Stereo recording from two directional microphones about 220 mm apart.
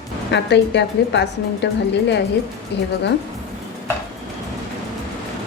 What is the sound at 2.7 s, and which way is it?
Speech, 50° left (ahead or behind).